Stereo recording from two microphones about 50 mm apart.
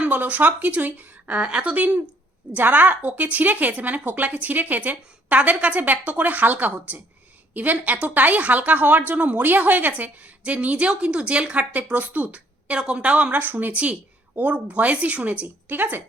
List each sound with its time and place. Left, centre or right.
0.0 s a woman's voice: right
11.7 s speech: right
13.7 s a woman's voice: right